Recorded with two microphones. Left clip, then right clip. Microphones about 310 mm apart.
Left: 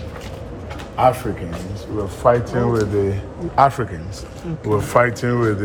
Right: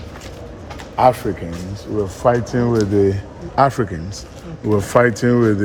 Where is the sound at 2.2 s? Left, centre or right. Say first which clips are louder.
Left 1 dB; right.